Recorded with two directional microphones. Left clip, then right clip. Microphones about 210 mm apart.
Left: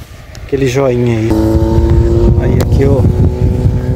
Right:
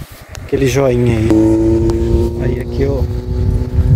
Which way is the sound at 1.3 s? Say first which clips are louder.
Right 5 dB; 30° left (ahead or behind).